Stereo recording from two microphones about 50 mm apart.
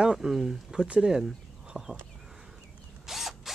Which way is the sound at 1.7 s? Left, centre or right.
Centre.